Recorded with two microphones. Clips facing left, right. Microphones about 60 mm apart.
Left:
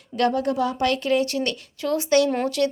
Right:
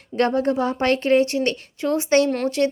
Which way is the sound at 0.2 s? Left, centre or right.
Right.